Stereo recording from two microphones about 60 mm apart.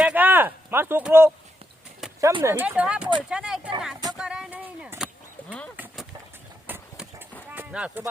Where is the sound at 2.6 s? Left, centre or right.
Right.